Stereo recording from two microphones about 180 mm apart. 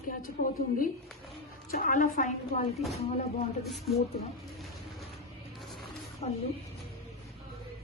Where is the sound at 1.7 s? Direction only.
50° left (ahead or behind).